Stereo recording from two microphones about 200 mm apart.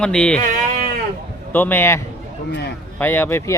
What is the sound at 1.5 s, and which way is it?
A man's voice, 10° left (ahead or behind).